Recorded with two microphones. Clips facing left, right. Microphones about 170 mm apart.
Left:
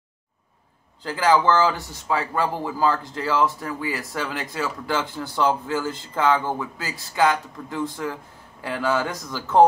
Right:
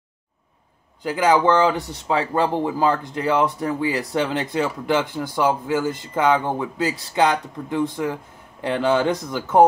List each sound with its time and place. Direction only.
1.0 s speech: 20° right (ahead or behind)